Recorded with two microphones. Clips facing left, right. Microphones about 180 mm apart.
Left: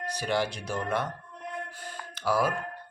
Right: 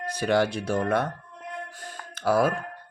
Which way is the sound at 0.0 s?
55° right (ahead or behind).